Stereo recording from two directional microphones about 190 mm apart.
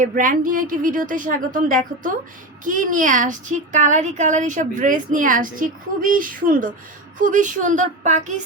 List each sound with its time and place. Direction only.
0.0 s a woman's voice: 45° right (ahead or behind)